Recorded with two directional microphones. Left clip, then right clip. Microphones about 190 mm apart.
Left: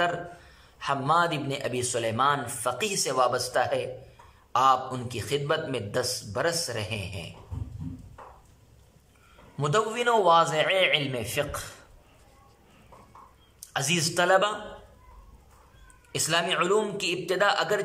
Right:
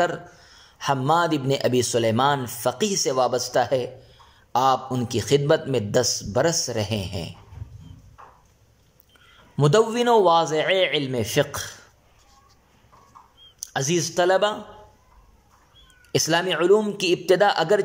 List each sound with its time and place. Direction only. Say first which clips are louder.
0.7 s speech: right 3 dB; 25° right (ahead or behind)
9.6 s speech: right 7 dB; 20° right (ahead or behind)
13.7 s speech: right 3 dB; 20° right (ahead or behind)
16.1 s speech: right 5 dB; 30° right (ahead or behind)